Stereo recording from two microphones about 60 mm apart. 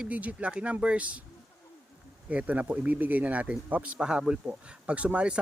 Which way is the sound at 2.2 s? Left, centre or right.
Right.